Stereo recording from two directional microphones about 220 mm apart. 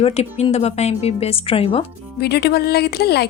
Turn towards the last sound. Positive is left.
turn(degrees=45)  # may be behind; listen again after turning